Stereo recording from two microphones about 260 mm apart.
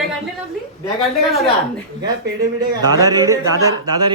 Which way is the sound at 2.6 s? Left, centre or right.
Centre.